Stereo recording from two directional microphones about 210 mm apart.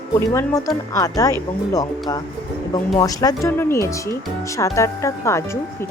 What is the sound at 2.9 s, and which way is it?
Speech, 20° left (ahead or behind).